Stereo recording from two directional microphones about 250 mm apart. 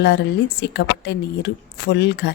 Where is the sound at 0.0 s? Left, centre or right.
Left.